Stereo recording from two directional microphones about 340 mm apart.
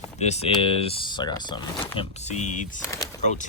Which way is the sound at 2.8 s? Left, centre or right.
Centre.